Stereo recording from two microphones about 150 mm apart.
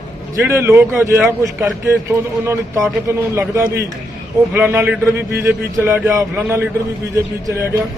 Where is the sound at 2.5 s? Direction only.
20° right (ahead or behind).